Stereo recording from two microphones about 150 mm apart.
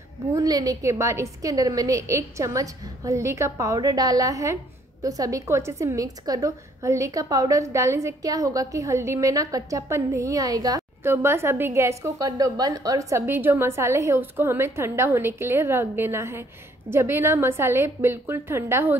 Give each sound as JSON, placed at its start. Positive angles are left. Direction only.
{"t": 0.3, "sound": "a woman's voice", "side_deg": -25}